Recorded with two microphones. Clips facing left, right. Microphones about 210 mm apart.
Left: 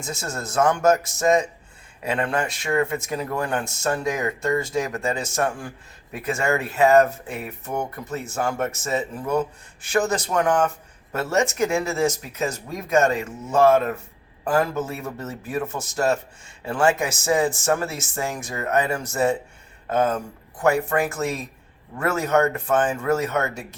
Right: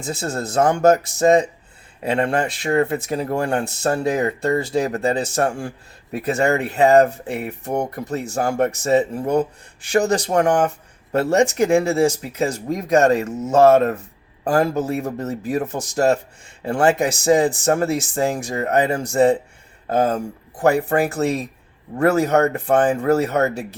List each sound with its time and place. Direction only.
0.0 s speech: 35° right (ahead or behind)